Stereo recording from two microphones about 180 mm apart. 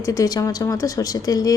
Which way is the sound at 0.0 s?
20° left (ahead or behind).